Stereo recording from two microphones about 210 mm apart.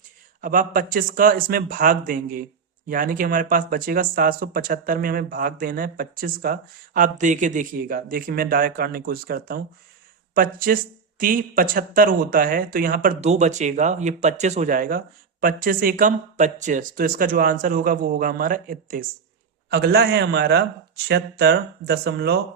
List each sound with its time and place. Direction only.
0.4 s a man's voice: 40° right (ahead or behind)